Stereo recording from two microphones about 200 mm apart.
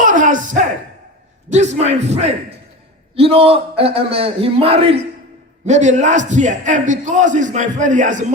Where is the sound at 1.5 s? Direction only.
35° right (ahead or behind).